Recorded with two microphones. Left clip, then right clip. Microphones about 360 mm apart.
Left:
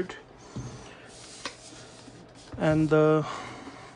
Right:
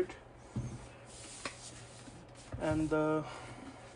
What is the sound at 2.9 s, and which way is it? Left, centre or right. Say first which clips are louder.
Speech: left 13 dB; left.